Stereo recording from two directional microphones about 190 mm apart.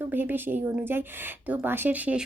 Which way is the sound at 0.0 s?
10° right (ahead or behind).